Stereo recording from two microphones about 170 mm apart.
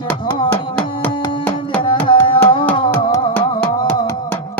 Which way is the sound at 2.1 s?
30° left (ahead or behind).